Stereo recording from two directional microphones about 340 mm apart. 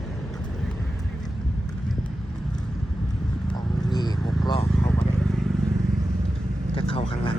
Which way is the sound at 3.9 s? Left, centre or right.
Centre.